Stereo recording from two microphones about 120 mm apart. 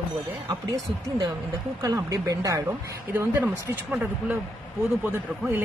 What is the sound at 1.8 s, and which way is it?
Speech, 30° right (ahead or behind).